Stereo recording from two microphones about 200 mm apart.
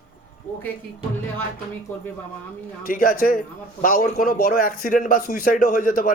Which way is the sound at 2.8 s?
45° left (ahead or behind).